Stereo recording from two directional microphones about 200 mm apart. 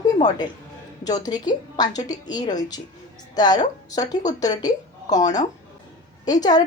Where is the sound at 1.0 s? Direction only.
20° left (ahead or behind).